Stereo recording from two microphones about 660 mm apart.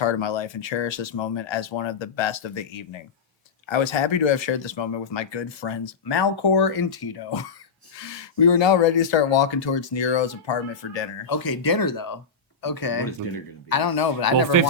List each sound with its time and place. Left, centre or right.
0.0 s speech: left